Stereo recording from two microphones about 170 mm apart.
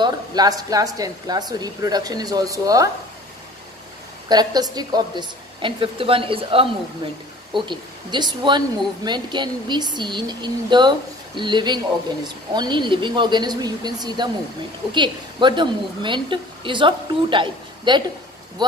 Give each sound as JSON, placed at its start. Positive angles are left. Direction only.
{"t": 0.0, "sound": "speech", "side_deg": -25}
{"t": 4.3, "sound": "speech", "side_deg": -25}